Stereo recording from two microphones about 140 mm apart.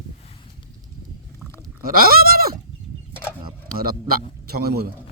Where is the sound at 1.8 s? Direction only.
90° right.